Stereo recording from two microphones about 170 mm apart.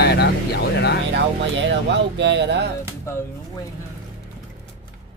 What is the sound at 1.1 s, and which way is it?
Speech, 90° right.